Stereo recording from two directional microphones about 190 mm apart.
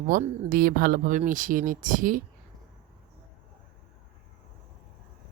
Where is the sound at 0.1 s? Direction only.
50° right (ahead or behind).